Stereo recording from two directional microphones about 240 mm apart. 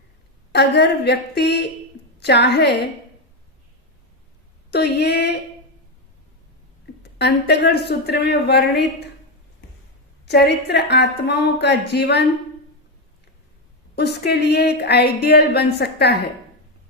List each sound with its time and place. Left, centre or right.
0.5 s a woman's voice: left
4.7 s speech: left
7.0 s speech: left
10.7 s speech: left
13.9 s speech: left